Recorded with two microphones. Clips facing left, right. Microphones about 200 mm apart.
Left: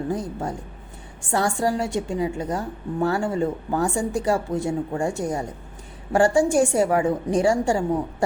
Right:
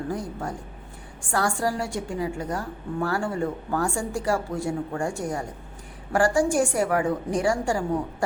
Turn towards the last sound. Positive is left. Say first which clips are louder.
# left 4 dB
turn(degrees=25)  # may be behind; listen again after turning